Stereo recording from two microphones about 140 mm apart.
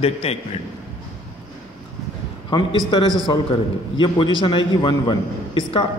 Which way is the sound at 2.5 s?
35° left (ahead or behind).